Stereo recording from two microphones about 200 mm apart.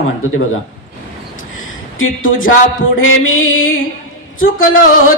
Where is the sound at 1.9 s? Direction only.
85° left.